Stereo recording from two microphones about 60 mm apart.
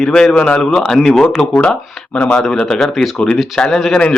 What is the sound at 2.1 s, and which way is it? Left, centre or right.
Speech, left.